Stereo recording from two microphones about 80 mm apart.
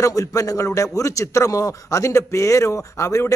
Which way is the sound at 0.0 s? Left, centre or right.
Left.